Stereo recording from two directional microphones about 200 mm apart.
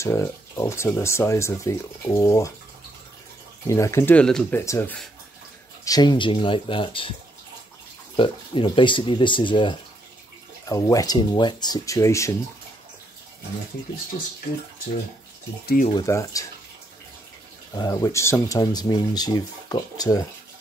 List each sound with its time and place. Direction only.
0.0 s speech: 15° left (ahead or behind)
3.6 s speech: 15° left (ahead or behind)
5.9 s speech: 20° left (ahead or behind)
8.2 s speech: 25° left (ahead or behind)
15.6 s speech: 45° left (ahead or behind)
15.9 s speech: 15° left (ahead or behind)
17.7 s speech: 20° left (ahead or behind)